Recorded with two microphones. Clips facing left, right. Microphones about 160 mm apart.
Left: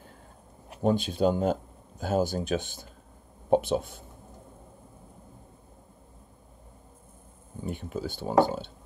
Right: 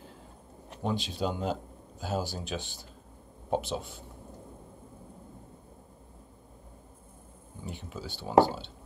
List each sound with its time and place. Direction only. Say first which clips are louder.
0.8 s speech: left 7 dB; 50° left (ahead or behind)
7.6 s speech: left 7 dB; 50° left (ahead or behind)